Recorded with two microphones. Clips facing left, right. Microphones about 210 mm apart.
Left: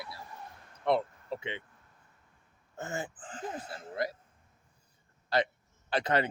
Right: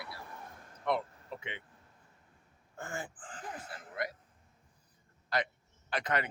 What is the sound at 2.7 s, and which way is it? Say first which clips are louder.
Speech: left 4 dB; 20° left (ahead or behind).